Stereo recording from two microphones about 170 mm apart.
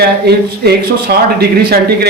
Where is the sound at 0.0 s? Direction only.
70° right (ahead or behind).